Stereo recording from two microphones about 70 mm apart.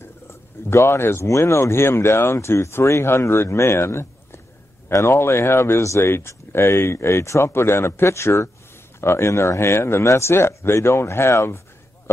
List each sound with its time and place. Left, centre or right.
0.0 s speech: left